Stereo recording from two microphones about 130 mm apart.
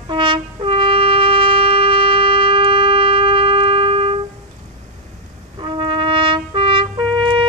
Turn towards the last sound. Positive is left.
turn(degrees=-40)  # may be behind; listen again after turning